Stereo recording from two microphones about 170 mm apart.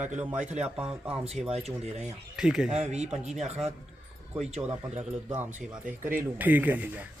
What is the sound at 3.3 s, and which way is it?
Speech, centre (ahead or behind).